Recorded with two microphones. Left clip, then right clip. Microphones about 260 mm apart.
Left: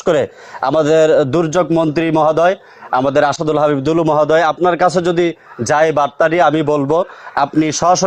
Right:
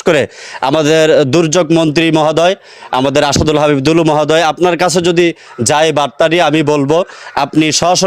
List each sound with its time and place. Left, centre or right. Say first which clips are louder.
0.0 s a man's voice: right 3 dB; right